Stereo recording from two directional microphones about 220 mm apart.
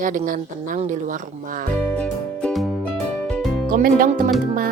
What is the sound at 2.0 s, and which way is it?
Music, 5° left (ahead or behind).